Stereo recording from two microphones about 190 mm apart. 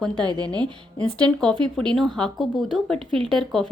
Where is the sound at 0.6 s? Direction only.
5° left (ahead or behind).